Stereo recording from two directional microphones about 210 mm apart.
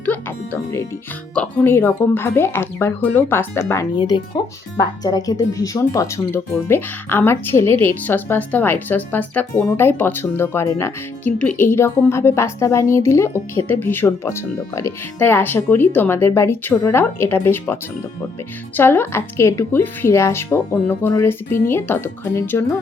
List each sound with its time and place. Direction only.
0.0 s speech: 10° left (ahead or behind)
18.8 s speech: 10° left (ahead or behind)